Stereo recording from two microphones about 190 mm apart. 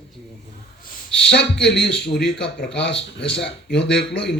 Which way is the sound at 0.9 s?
60° left (ahead or behind).